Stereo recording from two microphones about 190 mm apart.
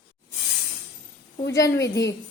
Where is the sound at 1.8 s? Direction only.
65° left (ahead or behind).